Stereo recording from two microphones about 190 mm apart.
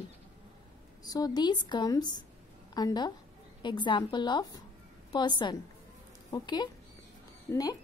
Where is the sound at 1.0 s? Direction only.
20° left (ahead or behind).